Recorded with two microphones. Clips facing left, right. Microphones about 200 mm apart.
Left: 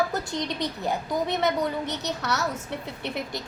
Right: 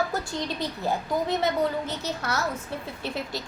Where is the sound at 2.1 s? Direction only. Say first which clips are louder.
Left 1 dB; 70° left (ahead or behind).